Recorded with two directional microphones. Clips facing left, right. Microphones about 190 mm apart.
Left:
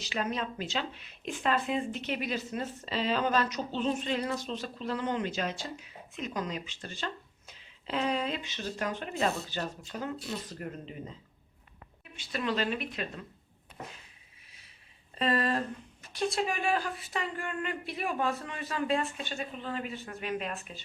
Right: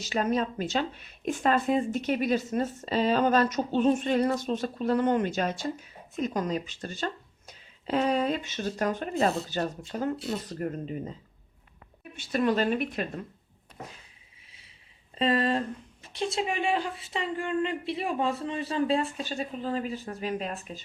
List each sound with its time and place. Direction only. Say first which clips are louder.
0.0 s speech: right 6 dB; 45° right (ahead or behind)
12.3 s speech: right 6 dB; 45° right (ahead or behind)
15.2 s speech: right 3 dB; 25° right (ahead or behind)